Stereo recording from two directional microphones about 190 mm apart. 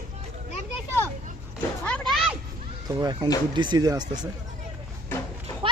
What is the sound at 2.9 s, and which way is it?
Speech, 20° right (ahead or behind).